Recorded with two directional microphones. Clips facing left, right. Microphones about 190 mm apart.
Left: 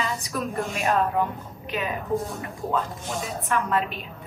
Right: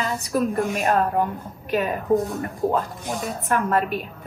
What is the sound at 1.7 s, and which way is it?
Speech, 50° right (ahead or behind).